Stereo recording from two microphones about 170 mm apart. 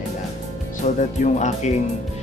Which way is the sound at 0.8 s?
45° left (ahead or behind).